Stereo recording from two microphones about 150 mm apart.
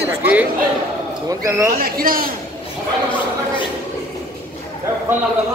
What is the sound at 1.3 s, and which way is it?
Speech, 20° right (ahead or behind).